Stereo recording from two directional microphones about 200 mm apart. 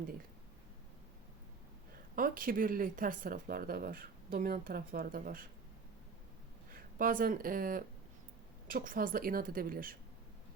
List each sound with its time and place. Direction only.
2.1 s a woman's voice: 45° right (ahead or behind)
7.0 s a woman's voice: 45° right (ahead or behind)